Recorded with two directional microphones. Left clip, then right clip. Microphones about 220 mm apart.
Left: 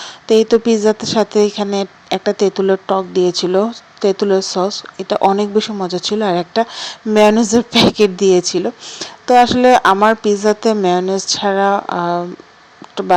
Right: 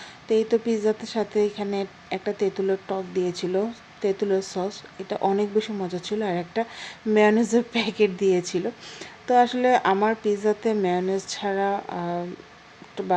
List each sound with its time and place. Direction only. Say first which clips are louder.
0.0 s speech: left 11 dB; 20° left (ahead or behind)